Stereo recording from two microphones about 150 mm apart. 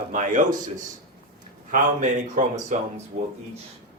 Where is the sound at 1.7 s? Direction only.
60° right (ahead or behind).